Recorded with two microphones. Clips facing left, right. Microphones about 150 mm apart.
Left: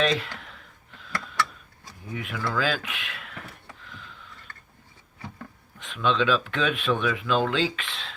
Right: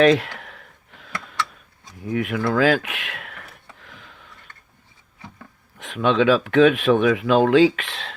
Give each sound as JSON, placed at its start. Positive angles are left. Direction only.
{"t": 0.2, "sound": "clicking", "side_deg": -55}
{"t": 2.0, "sound": "speech", "side_deg": -70}
{"t": 3.8, "sound": "a sound", "side_deg": -60}
{"t": 5.8, "sound": "speech", "side_deg": -65}